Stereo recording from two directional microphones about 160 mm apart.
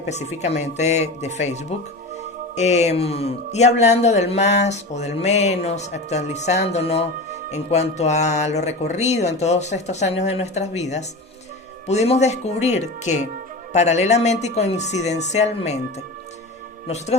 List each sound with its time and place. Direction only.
0.1 s speech: 45° left (ahead or behind)
16.8 s speech: 40° left (ahead or behind)